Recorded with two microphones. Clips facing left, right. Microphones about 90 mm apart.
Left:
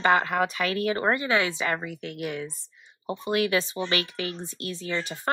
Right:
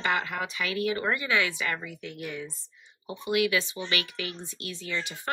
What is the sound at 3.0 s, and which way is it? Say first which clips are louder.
Speech: left 1 dB; 40° left (ahead or behind).